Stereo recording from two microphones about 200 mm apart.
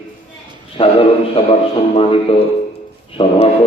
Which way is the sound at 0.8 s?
25° left (ahead or behind).